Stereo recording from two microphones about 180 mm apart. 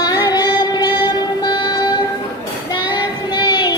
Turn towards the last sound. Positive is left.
turn(degrees=20)  # may be behind; listen again after turning